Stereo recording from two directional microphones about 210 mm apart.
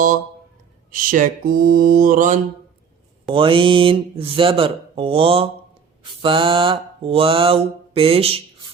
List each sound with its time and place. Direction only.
0.9 s mantra: 40° right (ahead or behind)
3.3 s speech: 25° right (ahead or behind)
6.0 s mantra: 25° right (ahead or behind)